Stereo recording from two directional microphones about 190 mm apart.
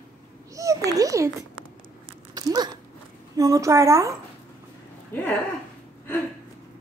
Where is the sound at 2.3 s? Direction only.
20° right (ahead or behind).